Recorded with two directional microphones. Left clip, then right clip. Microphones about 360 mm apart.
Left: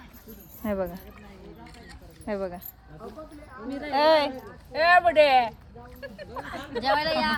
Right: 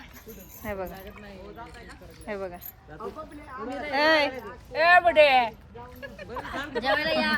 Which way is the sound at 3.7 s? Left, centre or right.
Centre.